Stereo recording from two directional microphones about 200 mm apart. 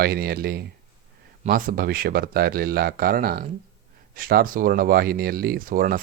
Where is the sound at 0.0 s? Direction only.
50° right (ahead or behind).